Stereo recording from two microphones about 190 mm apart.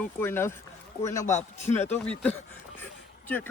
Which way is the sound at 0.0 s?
10° left (ahead or behind).